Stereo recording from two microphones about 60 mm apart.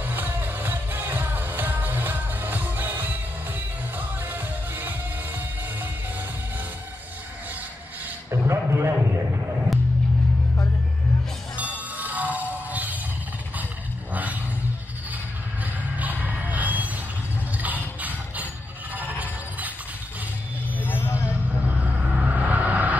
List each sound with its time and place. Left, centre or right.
0.0 s music: right
4.3 s music: right
8.3 s a sound: right
11.5 s music: right
14.1 s a sound: right
15.6 s a sound: right
17.6 s music: right
18.9 s sheep: right
20.8 s vehicle: left
21.6 s music: right